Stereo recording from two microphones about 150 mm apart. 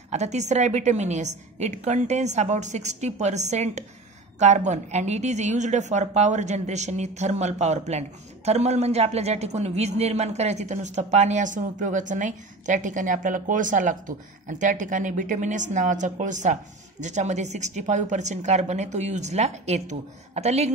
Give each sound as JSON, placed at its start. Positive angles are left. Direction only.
{"t": 0.1, "sound": "a woman's voice", "side_deg": -50}